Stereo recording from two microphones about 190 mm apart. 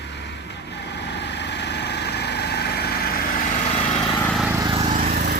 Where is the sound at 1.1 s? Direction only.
65° left (ahead or behind).